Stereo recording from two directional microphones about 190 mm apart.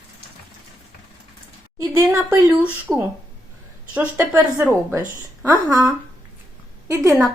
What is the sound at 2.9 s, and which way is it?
Speech, 5° left (ahead or behind).